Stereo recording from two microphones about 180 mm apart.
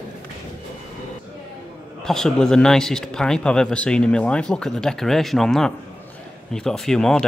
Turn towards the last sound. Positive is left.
turn(degrees=5)  # may be behind; listen again after turning